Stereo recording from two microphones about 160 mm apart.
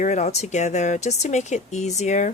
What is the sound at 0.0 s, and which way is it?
Speech, 45° left (ahead or behind).